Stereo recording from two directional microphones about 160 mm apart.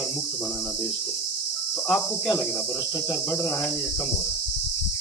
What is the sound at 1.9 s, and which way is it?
Speech, 10° left (ahead or behind).